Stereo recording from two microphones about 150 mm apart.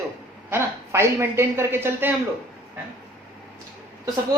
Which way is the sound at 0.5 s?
15° right (ahead or behind).